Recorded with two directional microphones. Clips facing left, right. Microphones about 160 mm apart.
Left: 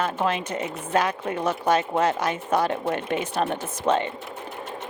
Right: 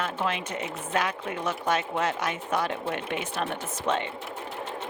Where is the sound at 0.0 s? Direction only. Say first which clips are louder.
Left 5 dB; 40° left (ahead or behind).